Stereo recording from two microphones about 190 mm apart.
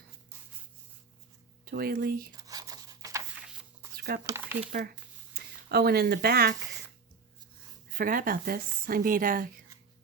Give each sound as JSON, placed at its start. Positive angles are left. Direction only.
{"t": 1.6, "sound": "speech", "side_deg": -50}
{"t": 2.3, "sound": "a sound", "side_deg": -20}
{"t": 3.9, "sound": "a sound", "side_deg": -55}
{"t": 4.3, "sound": "speech", "side_deg": -15}
{"t": 5.3, "sound": "speech", "side_deg": -55}
{"t": 7.9, "sound": "speech", "side_deg": -45}